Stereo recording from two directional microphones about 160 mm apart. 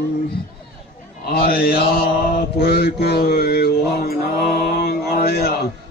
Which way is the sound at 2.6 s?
80° left.